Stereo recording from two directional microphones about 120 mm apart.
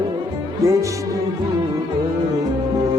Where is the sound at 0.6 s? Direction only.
25° right (ahead or behind).